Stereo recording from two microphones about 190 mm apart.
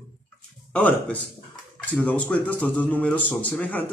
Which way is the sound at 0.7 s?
5° left (ahead or behind).